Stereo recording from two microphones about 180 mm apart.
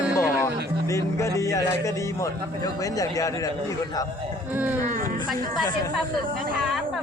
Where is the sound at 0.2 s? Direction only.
15° left (ahead or behind).